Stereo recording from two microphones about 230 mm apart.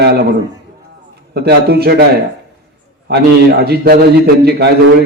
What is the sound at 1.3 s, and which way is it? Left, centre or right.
Speech, right.